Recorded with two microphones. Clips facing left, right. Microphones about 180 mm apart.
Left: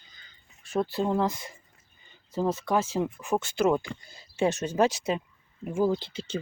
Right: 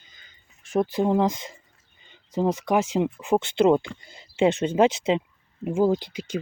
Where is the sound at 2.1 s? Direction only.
20° right (ahead or behind).